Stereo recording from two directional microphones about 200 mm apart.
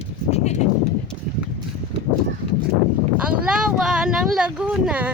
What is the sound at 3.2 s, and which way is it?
Speech, 5° right (ahead or behind).